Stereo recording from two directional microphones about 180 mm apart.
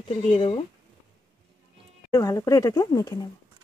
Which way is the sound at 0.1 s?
30° left (ahead or behind).